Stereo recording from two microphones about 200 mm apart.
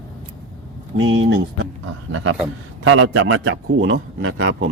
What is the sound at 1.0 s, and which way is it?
A man's voice, 80° right.